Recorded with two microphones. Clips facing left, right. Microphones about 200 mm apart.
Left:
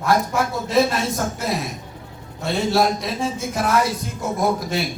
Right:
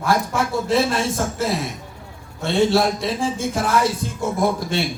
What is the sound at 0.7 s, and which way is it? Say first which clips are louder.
A man's voice: left 1 dB; 30° right (ahead or behind).